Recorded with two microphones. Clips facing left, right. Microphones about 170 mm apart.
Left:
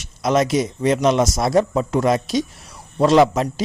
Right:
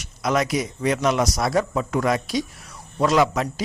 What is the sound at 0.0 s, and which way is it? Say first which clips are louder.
A man's voice: left 4 dB; 25° left (ahead or behind).